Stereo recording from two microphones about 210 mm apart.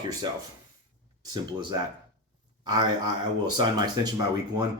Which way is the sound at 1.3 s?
20° right (ahead or behind).